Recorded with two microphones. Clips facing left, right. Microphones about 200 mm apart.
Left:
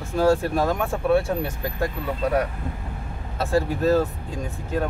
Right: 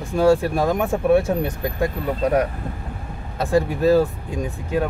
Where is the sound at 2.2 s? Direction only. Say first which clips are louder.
Right 3 dB; 40° right (ahead or behind).